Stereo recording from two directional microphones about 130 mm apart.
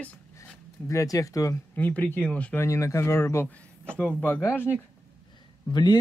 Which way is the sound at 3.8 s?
10° left (ahead or behind).